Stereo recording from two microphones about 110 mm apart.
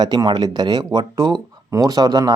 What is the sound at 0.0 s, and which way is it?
Speech, 40° right (ahead or behind).